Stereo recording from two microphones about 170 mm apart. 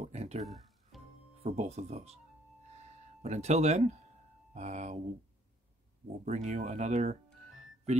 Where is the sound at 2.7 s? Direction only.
40° right (ahead or behind).